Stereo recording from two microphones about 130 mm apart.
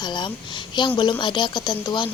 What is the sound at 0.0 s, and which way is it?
A woman's voice, 35° left (ahead or behind).